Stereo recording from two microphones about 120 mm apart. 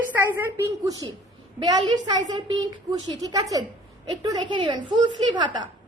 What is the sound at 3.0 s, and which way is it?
A woman's voice, 35° right (ahead or behind).